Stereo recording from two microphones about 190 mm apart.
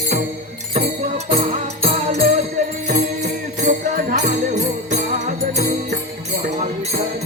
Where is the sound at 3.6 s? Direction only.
40° right (ahead or behind).